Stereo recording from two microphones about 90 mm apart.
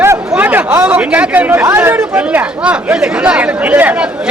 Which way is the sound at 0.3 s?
20° right (ahead or behind).